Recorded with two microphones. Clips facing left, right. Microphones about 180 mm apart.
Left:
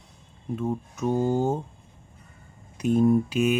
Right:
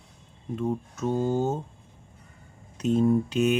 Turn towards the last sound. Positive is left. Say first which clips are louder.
# left 1 dB
turn(degrees=10)  # may be behind; listen again after turning